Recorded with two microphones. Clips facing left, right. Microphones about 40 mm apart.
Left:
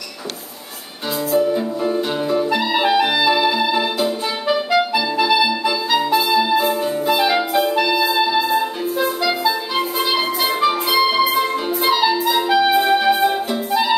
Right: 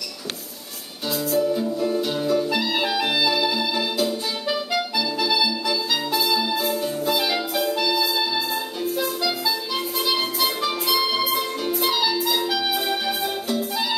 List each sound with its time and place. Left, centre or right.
1.3 s clarinet: left
6.3 s music: left